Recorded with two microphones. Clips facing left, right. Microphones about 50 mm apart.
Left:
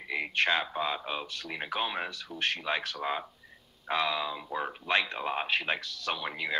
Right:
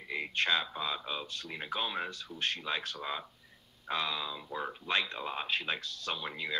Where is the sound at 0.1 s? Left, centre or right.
Left.